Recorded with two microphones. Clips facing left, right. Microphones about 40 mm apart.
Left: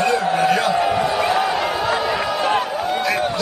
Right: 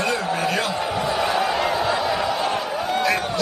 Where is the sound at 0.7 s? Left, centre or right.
Left.